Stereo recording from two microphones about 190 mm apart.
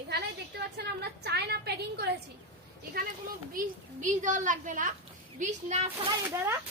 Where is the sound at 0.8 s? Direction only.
60° right (ahead or behind).